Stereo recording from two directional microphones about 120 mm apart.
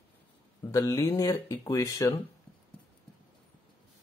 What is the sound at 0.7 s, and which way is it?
Speech, 25° left (ahead or behind).